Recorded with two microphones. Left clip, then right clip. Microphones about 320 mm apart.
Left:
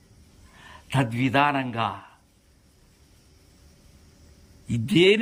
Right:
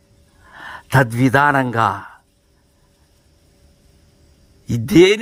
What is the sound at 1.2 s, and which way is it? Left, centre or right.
Speech, centre.